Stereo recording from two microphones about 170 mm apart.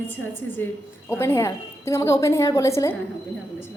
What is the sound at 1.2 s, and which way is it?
A woman's voice, 15° left (ahead or behind).